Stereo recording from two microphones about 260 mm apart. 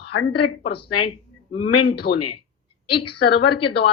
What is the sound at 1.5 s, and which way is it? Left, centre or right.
Speech, centre.